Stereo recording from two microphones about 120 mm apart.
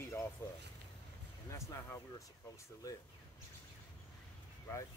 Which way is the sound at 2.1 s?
30° left (ahead or behind).